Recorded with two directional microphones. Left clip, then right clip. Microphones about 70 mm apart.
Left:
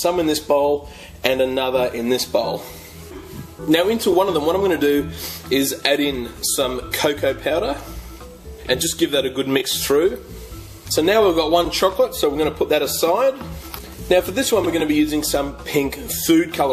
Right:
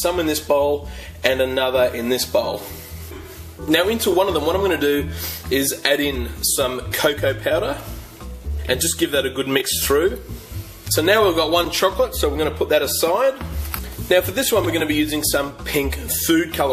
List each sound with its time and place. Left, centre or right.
0.0 s speech: left
3.6 s speech: left
10.9 s speech: left